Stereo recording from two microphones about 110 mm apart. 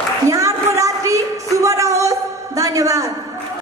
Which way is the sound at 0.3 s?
30° right (ahead or behind).